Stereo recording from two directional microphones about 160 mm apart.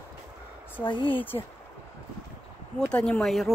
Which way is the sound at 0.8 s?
30° left (ahead or behind).